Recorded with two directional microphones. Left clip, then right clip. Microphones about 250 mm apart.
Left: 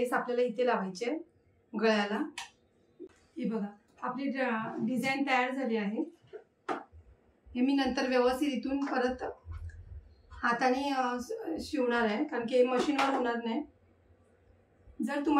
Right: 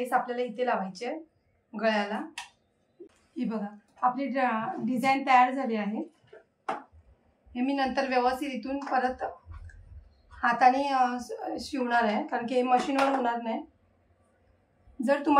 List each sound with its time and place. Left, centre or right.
0.0 s a woman's voice: centre
3.3 s a woman's voice: centre
7.5 s a woman's voice: centre
10.4 s a woman's voice: centre